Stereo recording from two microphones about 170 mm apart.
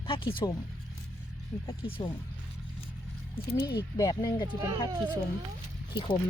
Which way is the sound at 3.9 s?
20° left (ahead or behind).